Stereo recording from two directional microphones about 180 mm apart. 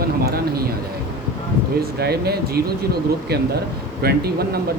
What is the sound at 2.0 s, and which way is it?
Speech, 60° right (ahead or behind).